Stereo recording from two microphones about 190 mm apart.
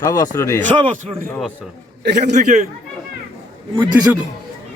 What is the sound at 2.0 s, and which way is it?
Speech, 60° right (ahead or behind).